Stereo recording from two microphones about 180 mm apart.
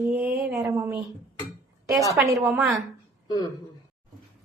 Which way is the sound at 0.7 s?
15° right (ahead or behind).